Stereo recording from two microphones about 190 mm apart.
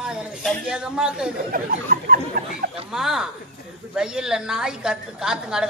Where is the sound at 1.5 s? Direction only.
45° right (ahead or behind).